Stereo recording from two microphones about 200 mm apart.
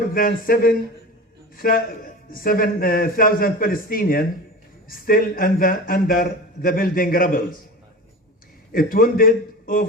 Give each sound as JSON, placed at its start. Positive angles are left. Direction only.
{"t": 0.1, "sound": "a man's voice", "side_deg": 45}
{"t": 8.7, "sound": "a man's voice", "side_deg": 45}